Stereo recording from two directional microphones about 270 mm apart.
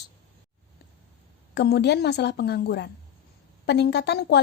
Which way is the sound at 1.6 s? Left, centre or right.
Left.